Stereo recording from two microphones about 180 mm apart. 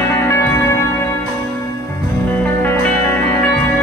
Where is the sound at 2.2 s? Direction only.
10° left (ahead or behind).